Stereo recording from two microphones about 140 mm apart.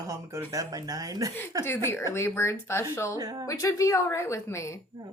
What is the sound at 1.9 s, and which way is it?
A woman's voice, 20° left (ahead or behind).